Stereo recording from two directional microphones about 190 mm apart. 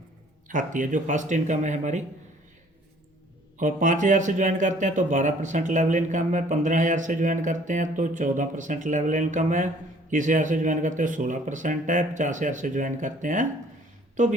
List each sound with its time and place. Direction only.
0.4 s speech: 45° right (ahead or behind)
3.6 s speech: 40° right (ahead or behind)